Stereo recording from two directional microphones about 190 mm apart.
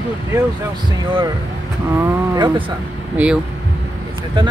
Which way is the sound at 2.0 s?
20° right (ahead or behind).